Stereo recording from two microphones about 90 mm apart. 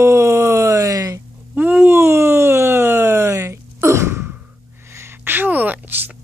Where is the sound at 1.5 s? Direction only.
20° right (ahead or behind).